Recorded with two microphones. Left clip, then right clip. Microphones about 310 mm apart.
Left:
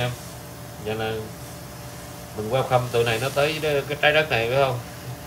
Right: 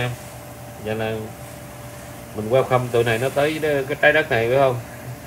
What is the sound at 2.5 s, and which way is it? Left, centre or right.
Speech, right.